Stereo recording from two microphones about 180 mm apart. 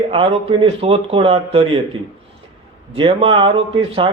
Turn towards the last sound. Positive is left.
turn(degrees=-30)  # may be behind; listen again after turning